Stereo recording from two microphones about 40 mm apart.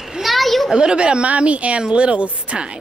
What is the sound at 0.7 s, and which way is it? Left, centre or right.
Speech, right.